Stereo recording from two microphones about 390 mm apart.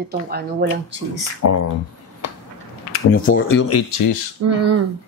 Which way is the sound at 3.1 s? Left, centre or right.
Left.